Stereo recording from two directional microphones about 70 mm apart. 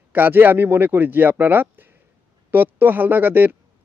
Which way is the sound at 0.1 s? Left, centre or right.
Right.